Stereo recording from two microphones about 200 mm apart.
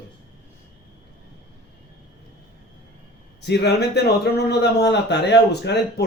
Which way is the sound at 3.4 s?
55° left (ahead or behind).